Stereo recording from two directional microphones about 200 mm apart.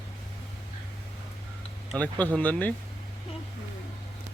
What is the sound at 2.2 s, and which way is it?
Speech, 10° left (ahead or behind).